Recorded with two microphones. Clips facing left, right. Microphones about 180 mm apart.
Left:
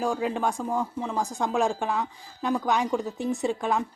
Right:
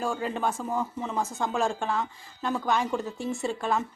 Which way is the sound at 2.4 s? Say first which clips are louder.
Left 2 dB; 15° left (ahead or behind).